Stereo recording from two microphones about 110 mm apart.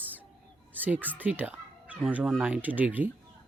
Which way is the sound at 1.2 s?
15° right (ahead or behind).